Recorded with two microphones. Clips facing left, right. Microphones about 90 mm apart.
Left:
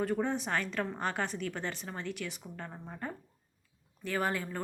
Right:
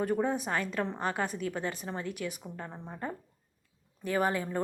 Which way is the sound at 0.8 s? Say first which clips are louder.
Right 2 dB; 25° right (ahead or behind).